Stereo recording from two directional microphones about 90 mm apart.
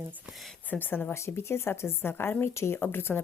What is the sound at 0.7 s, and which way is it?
Speech, 20° left (ahead or behind).